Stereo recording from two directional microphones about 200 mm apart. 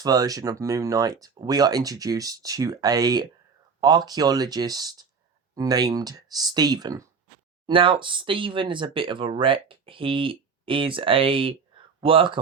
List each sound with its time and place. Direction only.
0.0 s speech: 20° right (ahead or behind)